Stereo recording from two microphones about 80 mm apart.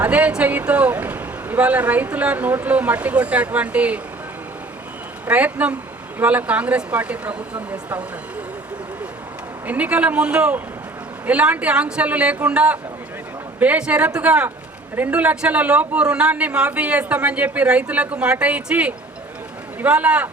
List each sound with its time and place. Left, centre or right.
0.0 s speech: centre
5.2 s speech: centre
9.6 s speech: centre